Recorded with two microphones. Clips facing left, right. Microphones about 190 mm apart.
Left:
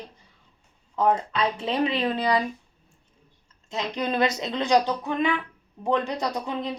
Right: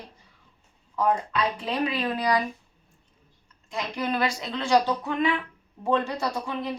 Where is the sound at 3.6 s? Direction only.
20° left (ahead or behind).